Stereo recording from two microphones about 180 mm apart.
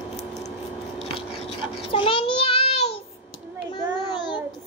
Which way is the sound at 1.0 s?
35° left (ahead or behind).